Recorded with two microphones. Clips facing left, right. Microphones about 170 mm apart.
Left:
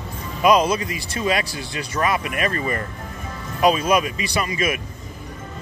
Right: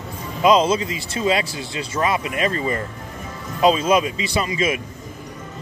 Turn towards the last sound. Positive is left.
turn(degrees=-25)  # may be behind; listen again after turning